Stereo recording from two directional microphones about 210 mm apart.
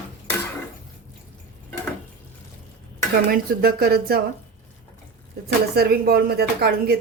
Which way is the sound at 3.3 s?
45° right (ahead or behind).